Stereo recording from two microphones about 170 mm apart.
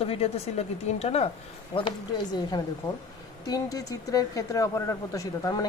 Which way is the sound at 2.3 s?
25° left (ahead or behind).